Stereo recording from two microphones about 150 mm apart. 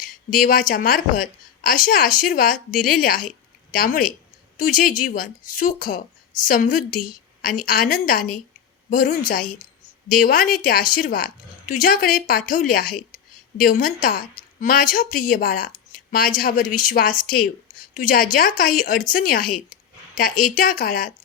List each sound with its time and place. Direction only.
0.0 s a woman's voice: 65° left (ahead or behind)